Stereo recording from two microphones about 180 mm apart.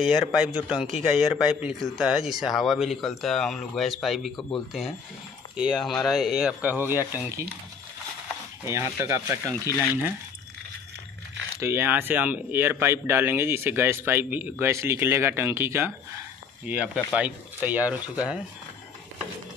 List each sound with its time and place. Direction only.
0.0 s a man's voice: centre (ahead or behind)
5.6 s a man's voice: centre (ahead or behind)
8.6 s speech: 15° right (ahead or behind)
9.7 s speech: 20° left (ahead or behind)
11.6 s speech: 15° right (ahead or behind)